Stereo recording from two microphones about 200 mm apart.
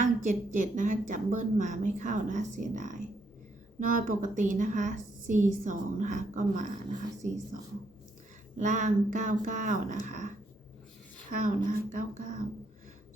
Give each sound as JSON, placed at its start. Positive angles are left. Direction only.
{"t": 0.0, "sound": "a woman's voice", "side_deg": -40}
{"t": 8.5, "sound": "a woman's voice", "side_deg": -40}
{"t": 11.3, "sound": "a woman's voice", "side_deg": -40}